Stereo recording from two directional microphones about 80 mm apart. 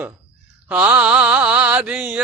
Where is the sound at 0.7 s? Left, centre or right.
Centre.